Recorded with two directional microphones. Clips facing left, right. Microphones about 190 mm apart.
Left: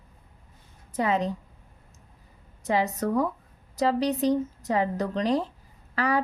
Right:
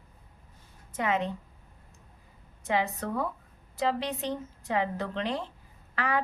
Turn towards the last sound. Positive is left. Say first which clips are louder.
# left 5 dB
turn(degrees=40)  # may be behind; listen again after turning